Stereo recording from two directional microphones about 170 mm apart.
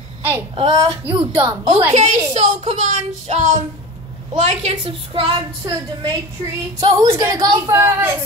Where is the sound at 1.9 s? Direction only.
40° right (ahead or behind).